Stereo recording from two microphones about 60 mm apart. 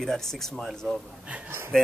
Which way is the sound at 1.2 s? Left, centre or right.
Right.